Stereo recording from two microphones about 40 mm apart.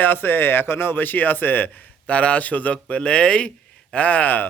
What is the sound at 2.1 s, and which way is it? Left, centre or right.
Speech, left.